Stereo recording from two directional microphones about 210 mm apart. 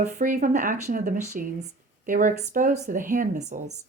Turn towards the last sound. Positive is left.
turn(degrees=-40)  # may be behind; listen again after turning